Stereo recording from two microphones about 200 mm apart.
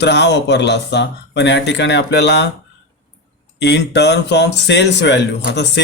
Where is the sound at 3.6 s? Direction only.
60° left (ahead or behind).